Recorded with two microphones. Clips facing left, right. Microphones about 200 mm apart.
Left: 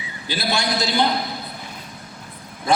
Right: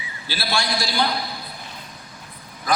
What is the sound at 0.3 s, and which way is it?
Speech, 20° left (ahead or behind).